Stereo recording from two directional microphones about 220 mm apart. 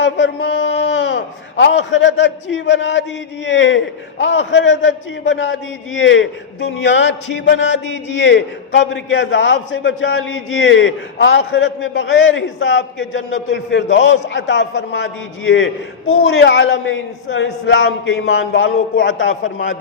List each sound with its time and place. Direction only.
0.0 s a man's voice: 55° left (ahead or behind)